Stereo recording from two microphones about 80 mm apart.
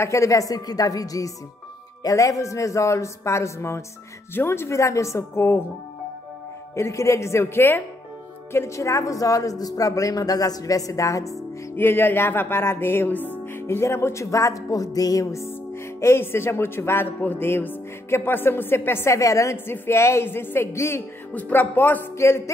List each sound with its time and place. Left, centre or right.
0.0 s a man's voice: left
6.7 s a man's voice: left
11.7 s a man's voice: left
21.3 s speech: left